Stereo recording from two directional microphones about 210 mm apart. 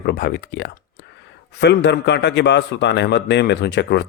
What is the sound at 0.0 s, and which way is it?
A man's voice, 50° left (ahead or behind).